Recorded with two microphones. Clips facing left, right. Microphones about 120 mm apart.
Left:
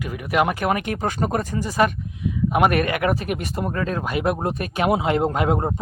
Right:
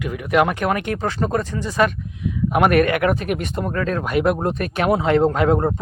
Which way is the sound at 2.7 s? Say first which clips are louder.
Right 4 dB; 30° left (ahead or behind).